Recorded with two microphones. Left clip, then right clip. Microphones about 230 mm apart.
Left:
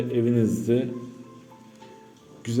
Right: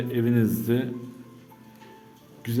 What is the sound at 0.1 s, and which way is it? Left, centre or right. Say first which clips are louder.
Speech: left 1 dB; centre.